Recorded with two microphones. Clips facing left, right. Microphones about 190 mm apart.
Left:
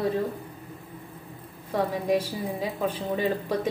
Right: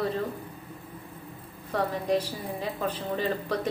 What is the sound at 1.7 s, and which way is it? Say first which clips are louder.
A woman's voice: left 2 dB; 10° left (ahead or behind).